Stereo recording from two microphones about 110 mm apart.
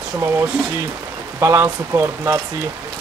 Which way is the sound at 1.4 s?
25° right (ahead or behind).